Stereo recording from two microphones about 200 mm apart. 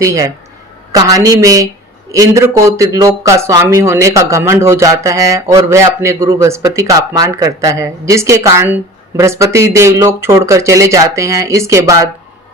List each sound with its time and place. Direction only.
0.0 s speech: 15° right (ahead or behind)